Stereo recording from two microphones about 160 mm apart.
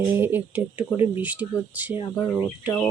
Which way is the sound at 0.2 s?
10° right (ahead or behind).